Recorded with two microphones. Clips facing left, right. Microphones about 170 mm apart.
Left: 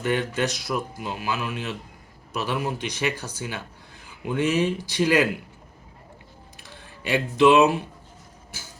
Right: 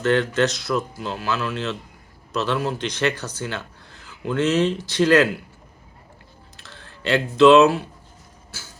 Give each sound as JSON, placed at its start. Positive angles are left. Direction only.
{"t": 0.0, "sound": "speech", "side_deg": 10}
{"t": 6.6, "sound": "a sound", "side_deg": 10}
{"t": 8.5, "sound": "vehicle", "side_deg": 15}